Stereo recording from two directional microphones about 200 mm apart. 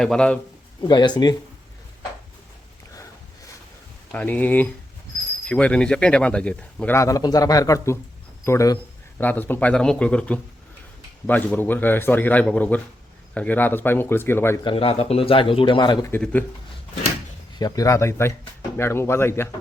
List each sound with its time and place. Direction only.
0.0 s a man's voice: 5° left (ahead or behind)
0.8 s a man's voice: 20° left (ahead or behind)
2.9 s a sound: 15° left (ahead or behind)
4.1 s speech: 10° left (ahead or behind)
14.6 s a man's voice: 25° left (ahead or behind)
16.1 s speech: 10° left (ahead or behind)
17.6 s speech: 15° left (ahead or behind)